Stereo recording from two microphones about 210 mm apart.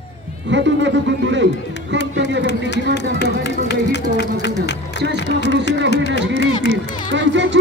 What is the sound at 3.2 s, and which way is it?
Run, 55° left (ahead or behind).